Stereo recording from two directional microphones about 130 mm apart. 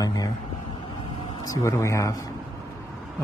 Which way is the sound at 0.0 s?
25° left (ahead or behind).